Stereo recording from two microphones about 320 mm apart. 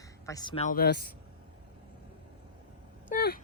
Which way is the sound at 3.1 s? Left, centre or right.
Left.